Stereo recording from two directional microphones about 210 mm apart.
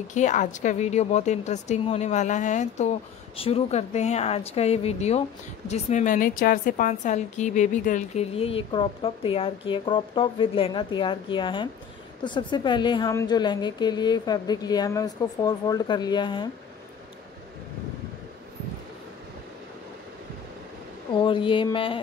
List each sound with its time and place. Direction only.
0.1 s a woman's voice: 35° left (ahead or behind)
21.1 s a woman's voice: 25° left (ahead or behind)